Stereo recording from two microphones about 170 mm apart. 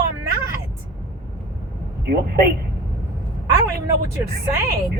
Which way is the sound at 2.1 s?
60° right (ahead or behind).